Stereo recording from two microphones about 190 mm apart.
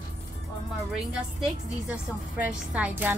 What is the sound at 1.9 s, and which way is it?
A woman's voice, 5° right (ahead or behind).